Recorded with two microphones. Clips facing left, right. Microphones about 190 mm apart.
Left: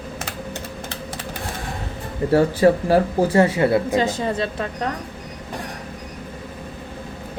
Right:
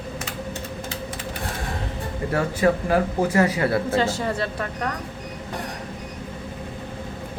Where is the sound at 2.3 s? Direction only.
30° left (ahead or behind).